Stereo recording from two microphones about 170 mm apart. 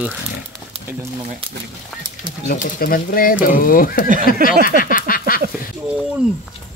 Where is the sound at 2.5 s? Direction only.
55° left (ahead or behind).